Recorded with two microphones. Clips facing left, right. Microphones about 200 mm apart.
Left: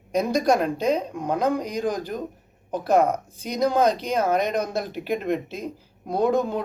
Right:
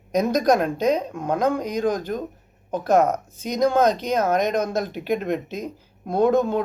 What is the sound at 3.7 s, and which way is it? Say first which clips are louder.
Speech: right 1 dB; 5° left (ahead or behind).